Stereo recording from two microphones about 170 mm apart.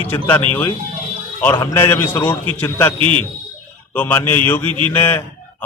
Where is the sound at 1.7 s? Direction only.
15° left (ahead or behind).